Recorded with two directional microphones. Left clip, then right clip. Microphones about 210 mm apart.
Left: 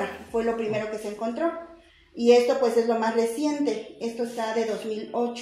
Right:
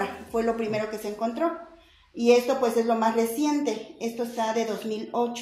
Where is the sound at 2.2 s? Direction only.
35° right (ahead or behind).